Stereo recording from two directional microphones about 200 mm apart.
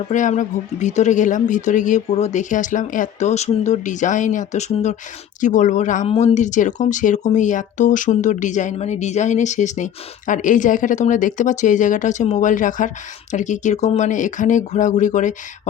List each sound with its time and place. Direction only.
0.1 s speech: 40° left (ahead or behind)